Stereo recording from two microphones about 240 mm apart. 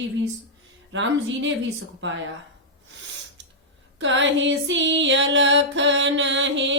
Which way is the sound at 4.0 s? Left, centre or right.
Right.